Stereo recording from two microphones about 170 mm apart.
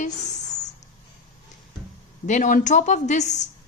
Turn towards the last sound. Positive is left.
turn(degrees=45)  # may be behind; listen again after turning